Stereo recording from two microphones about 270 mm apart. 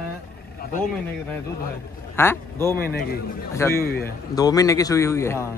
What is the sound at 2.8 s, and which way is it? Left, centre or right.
A man's voice, left.